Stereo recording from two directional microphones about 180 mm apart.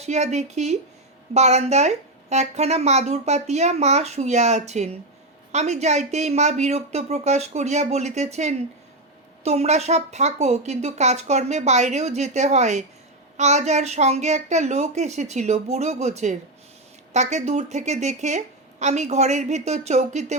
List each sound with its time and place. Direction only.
0.0 s a woman's voice: 40° right (ahead or behind)